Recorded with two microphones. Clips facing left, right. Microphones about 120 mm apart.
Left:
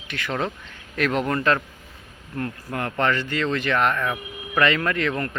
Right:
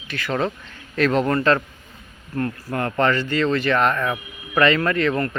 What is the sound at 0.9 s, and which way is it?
Speech, 15° left (ahead or behind).